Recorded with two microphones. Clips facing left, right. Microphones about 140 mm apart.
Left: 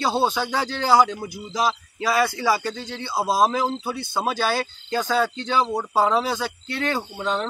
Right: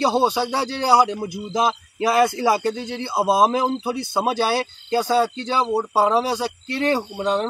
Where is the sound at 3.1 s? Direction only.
25° right (ahead or behind).